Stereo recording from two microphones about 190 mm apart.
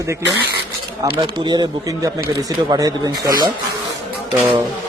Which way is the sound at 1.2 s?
20° right (ahead or behind).